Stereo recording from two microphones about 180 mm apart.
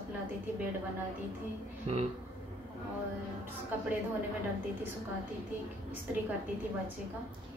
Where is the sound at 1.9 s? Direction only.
35° right (ahead or behind).